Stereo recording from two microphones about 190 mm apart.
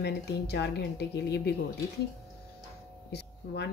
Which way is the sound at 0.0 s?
60° left (ahead or behind).